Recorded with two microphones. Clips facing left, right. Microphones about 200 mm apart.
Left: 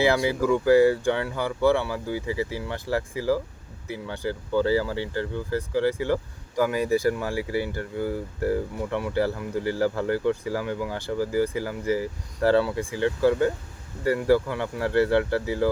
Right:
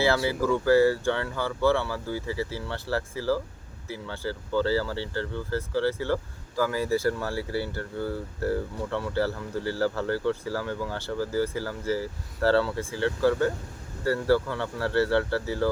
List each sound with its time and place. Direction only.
0.0 s speech: 15° left (ahead or behind)